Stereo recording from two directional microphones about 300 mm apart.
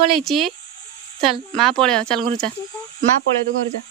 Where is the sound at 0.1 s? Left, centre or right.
Centre.